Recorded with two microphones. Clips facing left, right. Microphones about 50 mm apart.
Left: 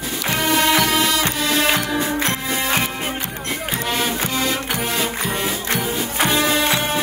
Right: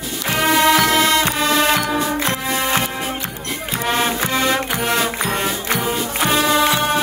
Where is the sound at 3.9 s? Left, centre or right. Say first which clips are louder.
Right 5 dB; right.